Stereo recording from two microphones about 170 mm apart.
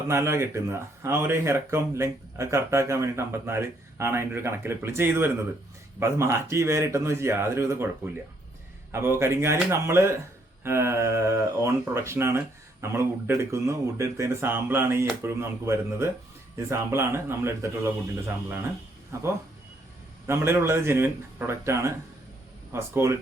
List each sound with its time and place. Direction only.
0.1 s speech: 15° right (ahead or behind)
8.9 s speech: 15° right (ahead or behind)
19.1 s speech: 15° right (ahead or behind)